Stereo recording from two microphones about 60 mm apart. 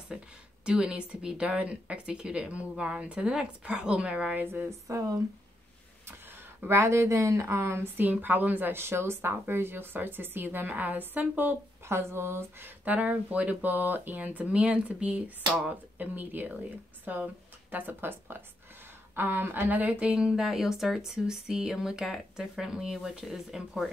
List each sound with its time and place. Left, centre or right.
0.1 s speech: centre
4.6 s speech: right
6.7 s speech: right
8.0 s a woman's voice: right
11.8 s speech: right
12.8 s speech: right; by 23.8 s centre